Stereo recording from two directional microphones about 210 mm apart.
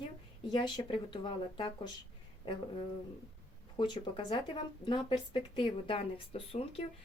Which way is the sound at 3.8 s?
20° left (ahead or behind).